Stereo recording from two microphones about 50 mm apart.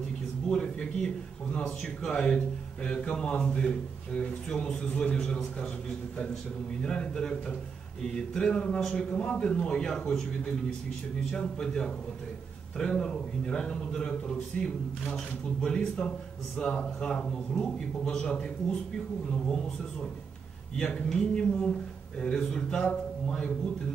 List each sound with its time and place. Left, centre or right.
0.5 s a man's voice: centre
11.3 s a man's voice: centre
21.1 s a man's voice: centre